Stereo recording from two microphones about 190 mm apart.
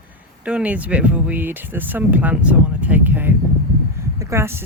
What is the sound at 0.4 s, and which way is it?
Speech, 5° right (ahead or behind).